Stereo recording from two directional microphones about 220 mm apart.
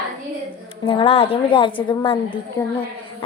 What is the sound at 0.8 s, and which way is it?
A woman's voice, 25° left (ahead or behind).